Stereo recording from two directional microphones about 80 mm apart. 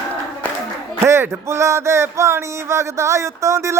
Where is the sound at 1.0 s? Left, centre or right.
Right.